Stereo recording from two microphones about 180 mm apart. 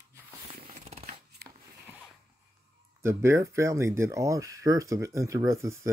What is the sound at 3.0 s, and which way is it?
Speech, 15° right (ahead or behind).